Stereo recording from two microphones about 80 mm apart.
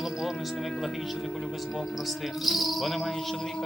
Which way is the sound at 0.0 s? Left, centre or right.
Centre.